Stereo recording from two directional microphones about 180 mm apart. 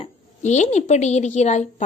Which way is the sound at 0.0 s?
40° left (ahead or behind).